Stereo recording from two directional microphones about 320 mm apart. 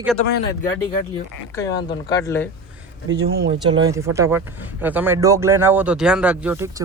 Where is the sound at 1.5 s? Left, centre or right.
Centre.